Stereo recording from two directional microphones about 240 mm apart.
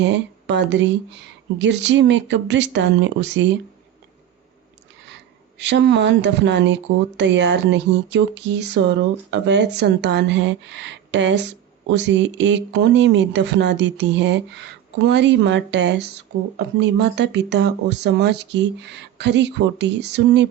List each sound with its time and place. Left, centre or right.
0.0 s speech: right
5.5 s speech: right